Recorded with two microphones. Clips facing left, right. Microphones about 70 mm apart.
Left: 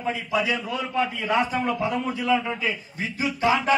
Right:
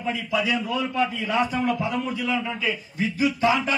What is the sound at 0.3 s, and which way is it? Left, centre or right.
Speech, left.